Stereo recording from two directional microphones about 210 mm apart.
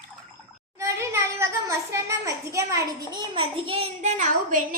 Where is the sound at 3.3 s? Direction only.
25° right (ahead or behind).